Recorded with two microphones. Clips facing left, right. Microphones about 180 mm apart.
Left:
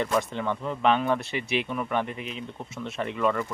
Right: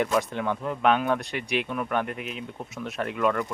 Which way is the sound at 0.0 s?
Centre (ahead or behind).